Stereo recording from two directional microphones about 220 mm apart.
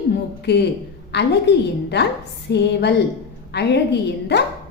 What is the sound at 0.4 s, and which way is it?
A woman's voice, 50° left (ahead or behind).